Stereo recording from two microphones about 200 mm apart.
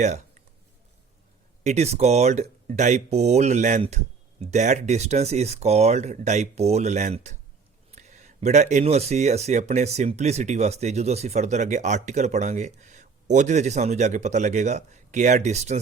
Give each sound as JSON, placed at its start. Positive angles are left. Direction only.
{"t": 1.6, "sound": "speech", "side_deg": -35}